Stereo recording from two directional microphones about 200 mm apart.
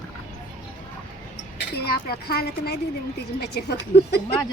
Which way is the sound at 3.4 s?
55° left (ahead or behind).